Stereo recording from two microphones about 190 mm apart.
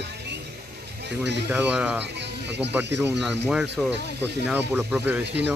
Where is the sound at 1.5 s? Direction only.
10° right (ahead or behind).